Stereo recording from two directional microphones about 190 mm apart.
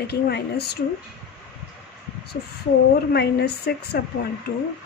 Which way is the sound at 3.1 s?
60° left (ahead or behind).